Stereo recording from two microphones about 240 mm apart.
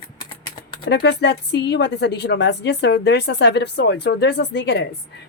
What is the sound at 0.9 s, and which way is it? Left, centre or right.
A woman's voice, left.